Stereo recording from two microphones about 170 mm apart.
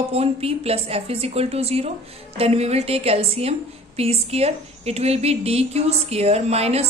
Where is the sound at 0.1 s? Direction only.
35° right (ahead or behind).